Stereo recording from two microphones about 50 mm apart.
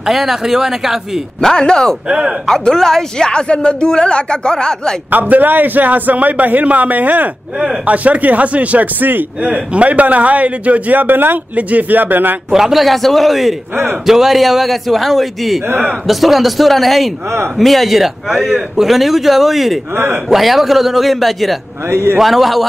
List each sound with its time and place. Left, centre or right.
0.0 s speech: centre
1.4 s speech: centre
2.0 s speech: centre
2.6 s speech: centre
5.1 s a man's voice: right
12.4 s a man's voice: centre
21.8 s a man's voice: right
22.2 s a man's voice: centre